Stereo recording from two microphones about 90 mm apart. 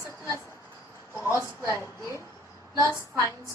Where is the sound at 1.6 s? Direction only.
35° left (ahead or behind).